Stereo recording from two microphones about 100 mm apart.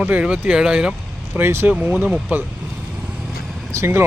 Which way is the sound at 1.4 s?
25° right (ahead or behind).